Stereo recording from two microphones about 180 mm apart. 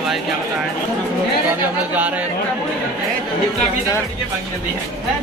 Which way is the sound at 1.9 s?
10° right (ahead or behind).